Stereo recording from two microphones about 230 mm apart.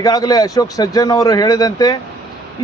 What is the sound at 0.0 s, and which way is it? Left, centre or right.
Speech, centre.